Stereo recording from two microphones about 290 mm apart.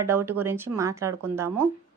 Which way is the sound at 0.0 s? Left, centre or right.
Centre.